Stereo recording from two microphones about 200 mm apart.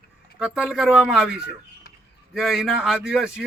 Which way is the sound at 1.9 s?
50° left (ahead or behind).